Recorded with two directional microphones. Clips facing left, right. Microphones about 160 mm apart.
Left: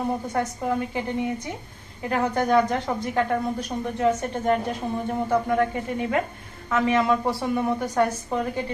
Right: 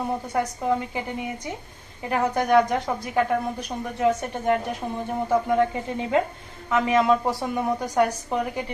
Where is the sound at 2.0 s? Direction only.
15° right (ahead or behind).